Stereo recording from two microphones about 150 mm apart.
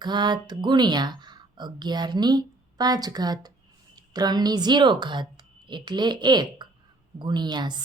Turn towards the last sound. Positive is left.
turn(degrees=-30)  # may be behind; listen again after turning